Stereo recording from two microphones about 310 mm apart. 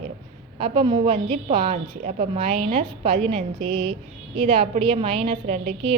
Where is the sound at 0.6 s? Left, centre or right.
Centre.